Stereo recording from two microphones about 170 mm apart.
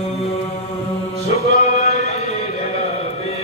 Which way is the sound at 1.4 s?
40° left (ahead or behind).